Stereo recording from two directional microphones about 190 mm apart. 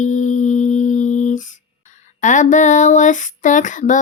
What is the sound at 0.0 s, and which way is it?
Humming, 40° left (ahead or behind).